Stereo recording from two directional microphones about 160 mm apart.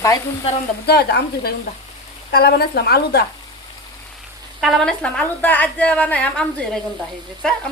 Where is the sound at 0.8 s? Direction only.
90° left.